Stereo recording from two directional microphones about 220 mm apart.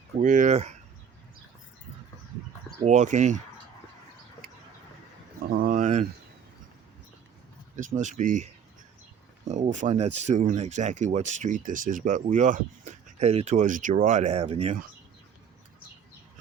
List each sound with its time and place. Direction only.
0.2 s speech: 35° right (ahead or behind)
2.8 s speech: 35° right (ahead or behind)
5.5 s a sound: 40° right (ahead or behind)
7.8 s speech: 35° right (ahead or behind)
9.5 s speech: 35° right (ahead or behind)